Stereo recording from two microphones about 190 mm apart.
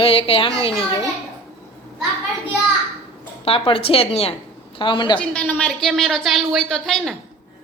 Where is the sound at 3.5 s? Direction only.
30° left (ahead or behind).